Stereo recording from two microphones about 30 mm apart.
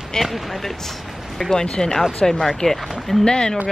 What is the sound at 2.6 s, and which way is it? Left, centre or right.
Speech, left.